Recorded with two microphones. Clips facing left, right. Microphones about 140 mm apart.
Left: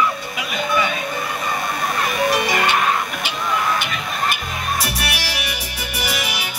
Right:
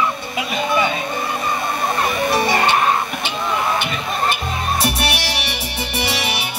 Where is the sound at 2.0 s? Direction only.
30° right (ahead or behind).